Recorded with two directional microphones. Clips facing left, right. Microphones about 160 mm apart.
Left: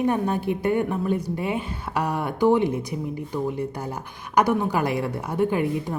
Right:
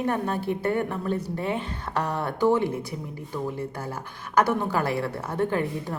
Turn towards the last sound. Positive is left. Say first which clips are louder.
# left 3 dB
turn(degrees=15)  # may be behind; listen again after turning